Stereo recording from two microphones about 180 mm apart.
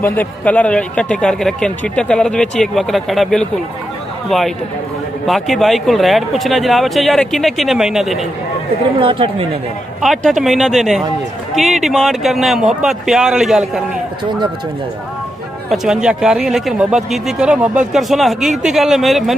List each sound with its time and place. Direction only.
0.0 s speech: 10° left (ahead or behind)
5.2 s speech: centre (ahead or behind)
9.0 s speech: 30° right (ahead or behind)
10.0 s speech: centre (ahead or behind)
15.7 s speech: centre (ahead or behind)